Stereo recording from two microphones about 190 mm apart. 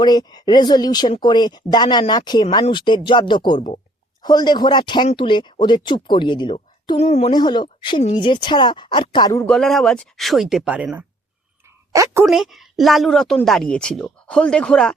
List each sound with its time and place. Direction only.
0.0 s speech: 20° left (ahead or behind)
7.3 s speech: 20° left (ahead or behind)
9.5 s a woman's voice: centre (ahead or behind)
12.2 s a woman's voice: centre (ahead or behind)